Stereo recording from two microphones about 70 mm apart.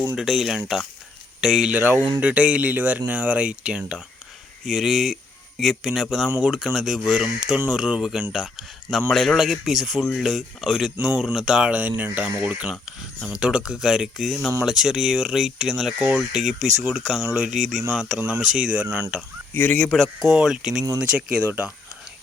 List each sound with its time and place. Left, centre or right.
0.2 s speech: centre
1.7 s speech: right
2.2 s speech: centre
4.6 s speech: centre
11.7 s speech: right
19.5 s speech: left
19.9 s speech: centre
20.3 s speech: centre